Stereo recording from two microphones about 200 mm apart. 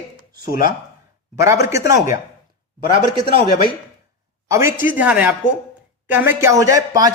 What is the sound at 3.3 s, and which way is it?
Speech, 25° right (ahead or behind).